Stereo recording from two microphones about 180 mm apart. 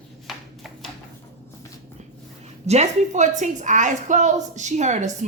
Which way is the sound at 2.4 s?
40° right (ahead or behind).